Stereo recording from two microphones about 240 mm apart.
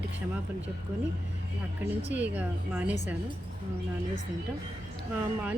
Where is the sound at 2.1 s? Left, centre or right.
Centre.